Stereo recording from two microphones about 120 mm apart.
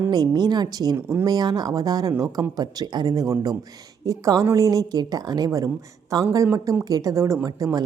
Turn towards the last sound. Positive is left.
turn(degrees=-30)  # may be behind; listen again after turning